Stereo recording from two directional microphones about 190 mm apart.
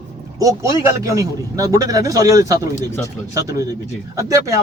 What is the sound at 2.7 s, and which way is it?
Speech, 15° left (ahead or behind).